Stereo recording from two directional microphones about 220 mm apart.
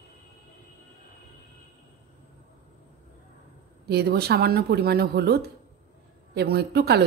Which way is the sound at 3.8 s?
45° right (ahead or behind).